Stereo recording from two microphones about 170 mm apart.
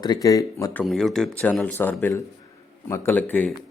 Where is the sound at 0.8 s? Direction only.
Centre (ahead or behind).